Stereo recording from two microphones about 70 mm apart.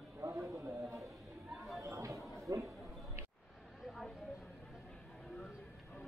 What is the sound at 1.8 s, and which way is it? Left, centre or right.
Chatter, right.